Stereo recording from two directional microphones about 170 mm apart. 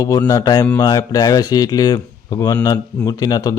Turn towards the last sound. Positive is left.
turn(degrees=20)  # may be behind; listen again after turning